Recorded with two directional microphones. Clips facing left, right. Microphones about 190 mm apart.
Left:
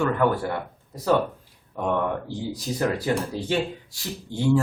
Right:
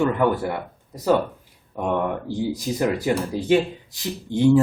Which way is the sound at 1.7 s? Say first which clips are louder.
Right 1 dB; 15° right (ahead or behind).